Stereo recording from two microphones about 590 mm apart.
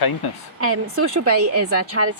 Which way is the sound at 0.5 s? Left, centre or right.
Right.